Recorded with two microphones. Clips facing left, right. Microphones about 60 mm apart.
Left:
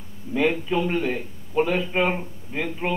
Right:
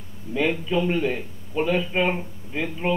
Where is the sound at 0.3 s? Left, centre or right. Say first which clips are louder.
Left 1 dB; centre.